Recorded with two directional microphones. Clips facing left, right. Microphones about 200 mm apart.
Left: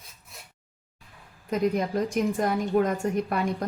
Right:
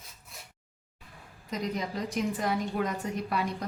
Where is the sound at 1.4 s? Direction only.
50° left (ahead or behind).